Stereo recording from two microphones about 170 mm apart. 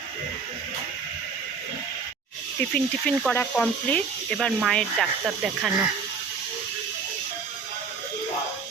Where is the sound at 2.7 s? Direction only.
5° left (ahead or behind).